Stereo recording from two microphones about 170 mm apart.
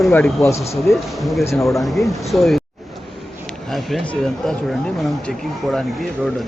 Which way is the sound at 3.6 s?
Centre (ahead or behind).